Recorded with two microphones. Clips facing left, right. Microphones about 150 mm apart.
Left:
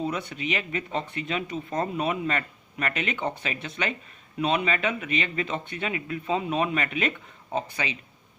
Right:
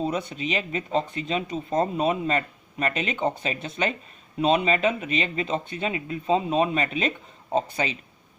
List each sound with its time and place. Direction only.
0.0 s speech: 25° right (ahead or behind)